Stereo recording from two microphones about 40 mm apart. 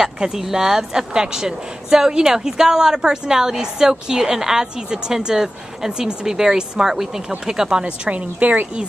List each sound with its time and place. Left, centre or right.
0.0 s a woman's voice: centre
8.0 s a woman's voice: right